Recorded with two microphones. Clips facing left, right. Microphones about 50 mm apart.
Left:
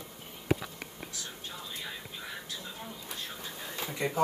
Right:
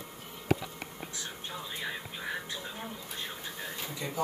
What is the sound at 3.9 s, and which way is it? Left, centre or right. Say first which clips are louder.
Speech: left 6 dB; left.